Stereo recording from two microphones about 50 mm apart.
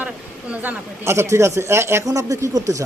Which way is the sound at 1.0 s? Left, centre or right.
Right.